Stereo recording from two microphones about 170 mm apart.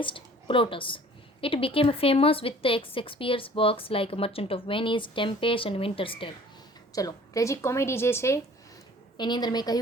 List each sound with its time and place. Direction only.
0.0 s a woman's voice: 30° left (ahead or behind)
6.9 s a woman's voice: 20° left (ahead or behind)
9.1 s a woman's voice: 25° left (ahead or behind)